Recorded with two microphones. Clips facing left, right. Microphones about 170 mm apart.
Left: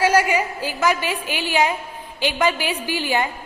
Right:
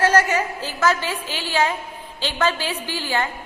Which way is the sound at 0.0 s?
10° left (ahead or behind).